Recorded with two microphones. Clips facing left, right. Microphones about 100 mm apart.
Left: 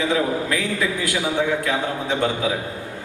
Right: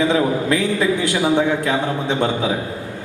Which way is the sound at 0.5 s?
25° right (ahead or behind).